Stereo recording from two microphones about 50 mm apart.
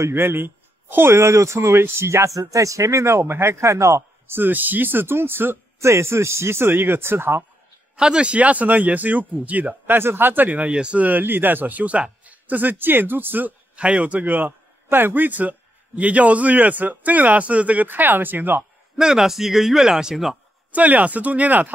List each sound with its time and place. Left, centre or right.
0.1 s speech: right
1.1 s speech: right
3.5 s speech: right
4.3 s speech: right
5.8 s a man's voice: right
7.9 s a man's voice: centre
9.8 s a man's voice: right
11.1 s a man's voice: right
13.7 s a man's voice: right
14.9 s a man's voice: right
17.8 s a man's voice: right
18.9 s speech: centre
20.7 s a man's voice: right